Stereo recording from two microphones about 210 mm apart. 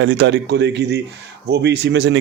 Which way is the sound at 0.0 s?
60° right (ahead or behind).